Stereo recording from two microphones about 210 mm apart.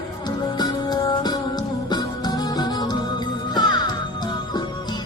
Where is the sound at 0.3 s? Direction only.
20° left (ahead or behind).